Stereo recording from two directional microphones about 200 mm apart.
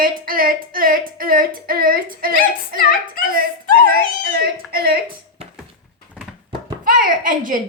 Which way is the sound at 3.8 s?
50° right (ahead or behind).